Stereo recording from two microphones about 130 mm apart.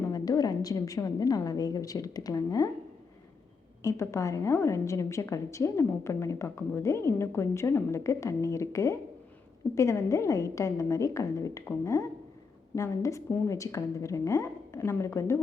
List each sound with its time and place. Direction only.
0.1 s a woman's voice: 30° left (ahead or behind)
3.8 s a woman's voice: 25° left (ahead or behind)